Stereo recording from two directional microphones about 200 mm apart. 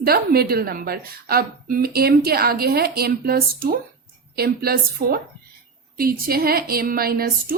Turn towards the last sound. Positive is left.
turn(degrees=-50)  # may be behind; listen again after turning